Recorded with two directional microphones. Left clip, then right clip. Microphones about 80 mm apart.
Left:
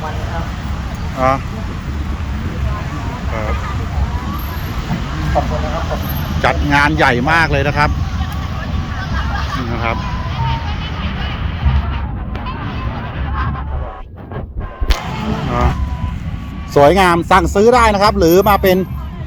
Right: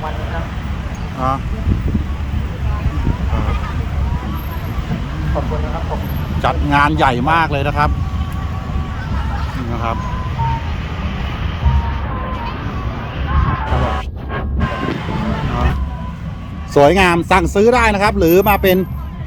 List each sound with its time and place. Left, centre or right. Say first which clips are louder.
5.3 s speech: left 5 dB; centre
6.4 s speech: left 1 dB; centre
9.7 s speech: left 1 dB; centre
16.7 s speech: left 1 dB; right